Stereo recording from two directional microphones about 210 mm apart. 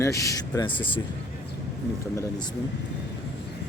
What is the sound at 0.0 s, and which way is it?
Speech, 15° left (ahead or behind).